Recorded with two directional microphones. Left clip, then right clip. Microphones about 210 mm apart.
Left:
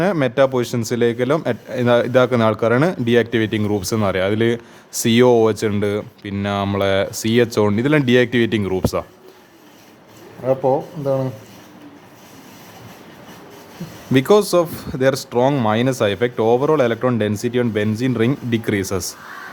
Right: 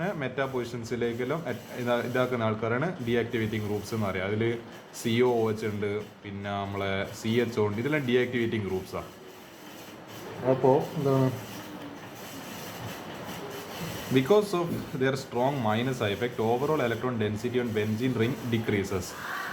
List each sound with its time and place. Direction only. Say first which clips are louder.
0.0 s speech: left 15 dB; 55° left (ahead or behind)
14.1 s speech: left 10 dB; 55° left (ahead or behind)